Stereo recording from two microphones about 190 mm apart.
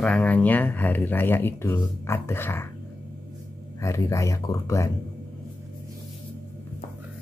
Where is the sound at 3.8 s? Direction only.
15° left (ahead or behind).